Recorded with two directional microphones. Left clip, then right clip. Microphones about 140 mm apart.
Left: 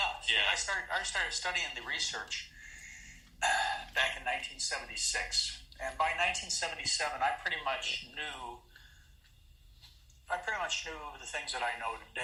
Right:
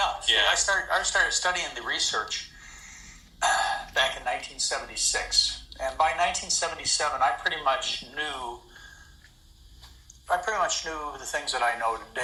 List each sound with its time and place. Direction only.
0.0 s speech: 35° right (ahead or behind)
3.4 s speech: 25° right (ahead or behind)
10.2 s speech: 35° right (ahead or behind)